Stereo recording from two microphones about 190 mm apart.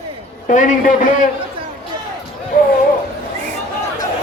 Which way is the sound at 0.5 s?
40° left (ahead or behind).